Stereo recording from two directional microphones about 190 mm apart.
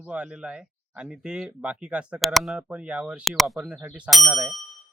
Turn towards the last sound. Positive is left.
turn(degrees=0)  # may be behind; listen again after turning